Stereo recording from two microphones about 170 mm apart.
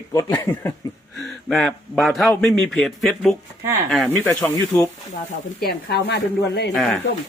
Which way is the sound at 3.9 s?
Centre (ahead or behind).